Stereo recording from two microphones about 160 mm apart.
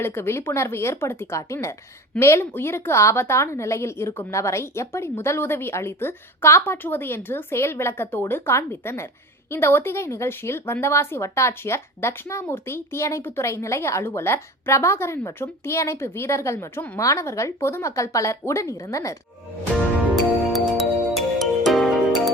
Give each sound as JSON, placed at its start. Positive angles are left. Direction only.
{"t": 0.0, "sound": "a woman's voice", "side_deg": 15}
{"t": 20.5, "sound": "music", "side_deg": 0}